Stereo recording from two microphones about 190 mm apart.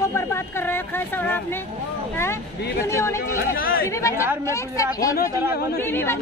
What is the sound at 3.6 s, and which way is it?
Speech, 50° left (ahead or behind).